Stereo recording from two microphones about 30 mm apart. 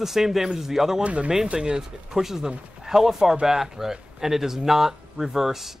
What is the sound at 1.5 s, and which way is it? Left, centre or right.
Speech, right.